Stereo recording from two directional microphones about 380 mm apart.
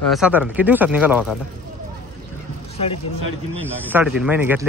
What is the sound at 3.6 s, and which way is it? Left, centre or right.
Speech, centre.